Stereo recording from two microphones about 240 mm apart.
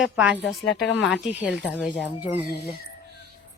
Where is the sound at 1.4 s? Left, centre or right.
Centre.